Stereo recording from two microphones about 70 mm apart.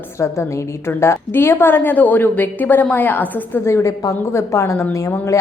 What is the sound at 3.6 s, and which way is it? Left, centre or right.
A woman's voice, left.